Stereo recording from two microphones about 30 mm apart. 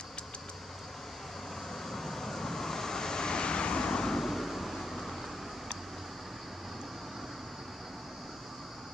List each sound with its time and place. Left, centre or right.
1.9 s vehicle: centre
4.2 s vehicle: centre